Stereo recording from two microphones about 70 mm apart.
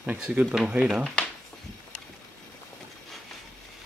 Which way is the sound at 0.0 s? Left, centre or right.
Centre.